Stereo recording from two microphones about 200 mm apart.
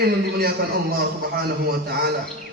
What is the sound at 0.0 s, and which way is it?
Speech, 50° right (ahead or behind).